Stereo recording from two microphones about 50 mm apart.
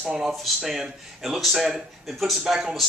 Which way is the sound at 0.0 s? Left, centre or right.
Centre.